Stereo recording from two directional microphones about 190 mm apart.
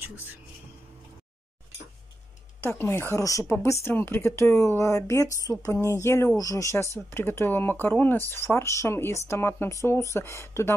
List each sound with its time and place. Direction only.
0.0 s speech: 10° right (ahead or behind)
2.6 s speech: 10° left (ahead or behind)